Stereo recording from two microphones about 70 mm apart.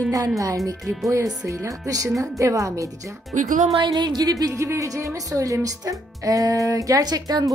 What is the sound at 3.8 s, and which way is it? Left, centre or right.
Speech, right.